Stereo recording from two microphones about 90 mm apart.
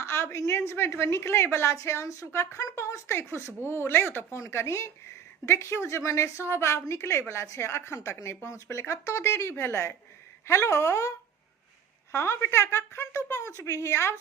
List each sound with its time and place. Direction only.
0.0 s a woman's voice: 30° left (ahead or behind)
12.1 s a woman's voice: 30° left (ahead or behind)